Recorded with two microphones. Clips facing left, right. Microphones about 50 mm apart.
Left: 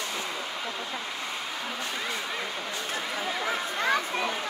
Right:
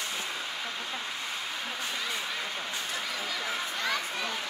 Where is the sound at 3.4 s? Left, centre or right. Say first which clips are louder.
Left 5 dB; left.